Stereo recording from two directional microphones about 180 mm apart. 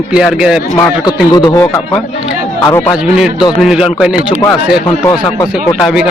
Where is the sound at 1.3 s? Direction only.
15° left (ahead or behind).